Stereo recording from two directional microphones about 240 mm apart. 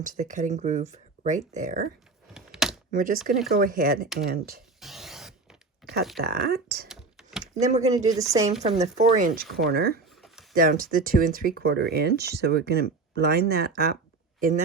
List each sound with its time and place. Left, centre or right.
0.0 s speech: right
2.3 s a sound: centre
2.9 s speech: right
4.8 s a sound: centre
5.8 s a sound: right
6.2 s speech: right
6.9 s typing: centre
7.5 s speech: right
7.9 s a woman's voice: centre
8.6 s speech: right
10.2 s a sound: centre
10.5 s speech: right